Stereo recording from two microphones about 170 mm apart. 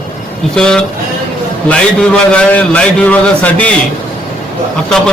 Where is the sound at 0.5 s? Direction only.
5° left (ahead or behind).